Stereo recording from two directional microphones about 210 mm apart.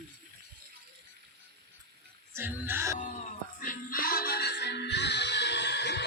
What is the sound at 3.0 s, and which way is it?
Music, 40° left (ahead or behind).